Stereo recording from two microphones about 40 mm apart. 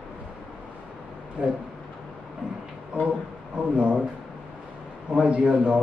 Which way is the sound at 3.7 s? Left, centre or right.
Right.